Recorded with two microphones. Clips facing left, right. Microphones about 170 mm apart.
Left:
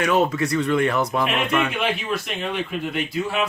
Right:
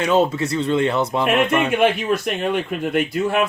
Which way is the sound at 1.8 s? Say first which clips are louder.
Right 7 dB; 50° right (ahead or behind).